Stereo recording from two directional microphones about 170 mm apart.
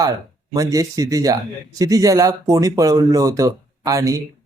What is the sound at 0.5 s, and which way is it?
Speech, 20° right (ahead or behind).